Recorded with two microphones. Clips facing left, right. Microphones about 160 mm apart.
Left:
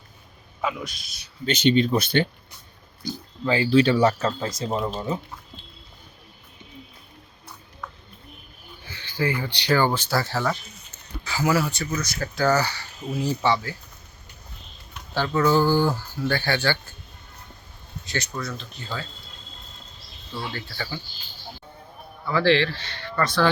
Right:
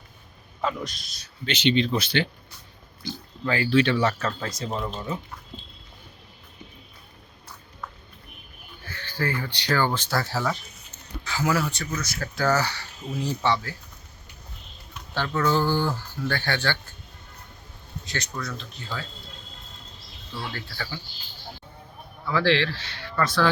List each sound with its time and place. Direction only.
0.6 s speech: 5° left (ahead or behind)
1.5 s speech: 45° left (ahead or behind)
3.4 s speech: 25° left (ahead or behind)
8.9 s a sound: 15° left (ahead or behind)
9.6 s speech: 15° left (ahead or behind)
15.1 s speech: 10° left (ahead or behind)
18.0 s speech: 5° left (ahead or behind)
20.3 s speech: centre (ahead or behind)
22.3 s speech: centre (ahead or behind)